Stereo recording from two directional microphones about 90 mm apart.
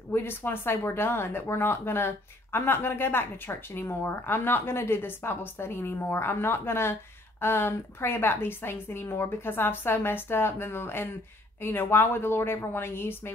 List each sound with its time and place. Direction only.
0.1 s speech: 25° left (ahead or behind)